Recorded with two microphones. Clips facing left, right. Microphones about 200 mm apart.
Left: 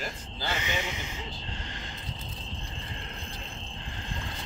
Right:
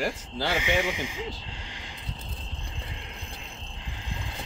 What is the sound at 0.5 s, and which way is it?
Speech, 10° right (ahead or behind).